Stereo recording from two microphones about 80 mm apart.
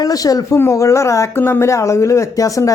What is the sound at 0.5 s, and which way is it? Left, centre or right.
Speech, left.